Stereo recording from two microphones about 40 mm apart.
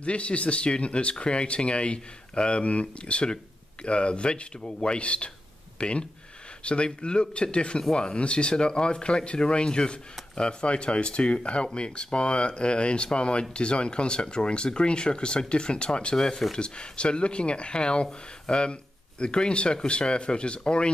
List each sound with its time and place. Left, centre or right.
0.0 s speech: left